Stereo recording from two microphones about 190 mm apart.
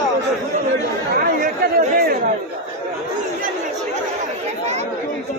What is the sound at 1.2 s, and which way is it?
Chatter, 50° right (ahead or behind).